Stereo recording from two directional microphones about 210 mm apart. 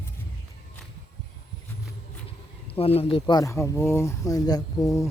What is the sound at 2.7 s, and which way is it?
Speech, 30° left (ahead or behind).